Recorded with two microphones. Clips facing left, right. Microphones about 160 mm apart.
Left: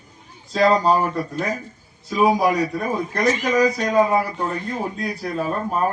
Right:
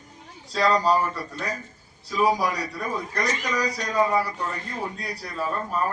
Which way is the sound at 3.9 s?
50° left (ahead or behind).